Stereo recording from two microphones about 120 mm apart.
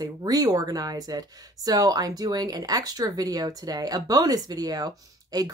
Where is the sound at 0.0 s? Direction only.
30° right (ahead or behind).